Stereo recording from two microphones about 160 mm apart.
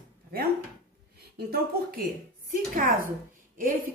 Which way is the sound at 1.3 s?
75° right (ahead or behind).